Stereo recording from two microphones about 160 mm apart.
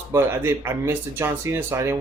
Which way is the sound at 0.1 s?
15° right (ahead or behind).